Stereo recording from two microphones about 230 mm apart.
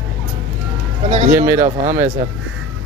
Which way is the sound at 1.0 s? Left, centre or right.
Right.